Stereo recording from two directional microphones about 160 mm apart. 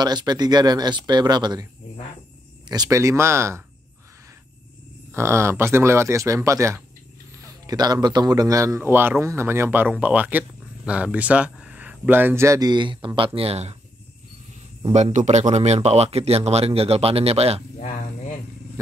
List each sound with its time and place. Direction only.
0.0 s speech: 25° right (ahead or behind)
2.7 s speech: 20° right (ahead or behind)
5.1 s speech: 15° right (ahead or behind); by 13.7 s 40° right (ahead or behind)
14.9 s speech: 40° right (ahead or behind)